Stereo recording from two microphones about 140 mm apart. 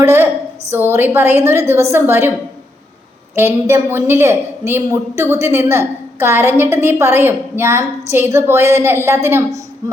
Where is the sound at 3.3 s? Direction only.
20° right (ahead or behind).